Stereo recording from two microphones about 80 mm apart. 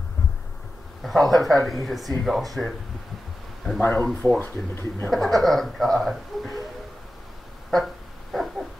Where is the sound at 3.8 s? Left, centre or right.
Left.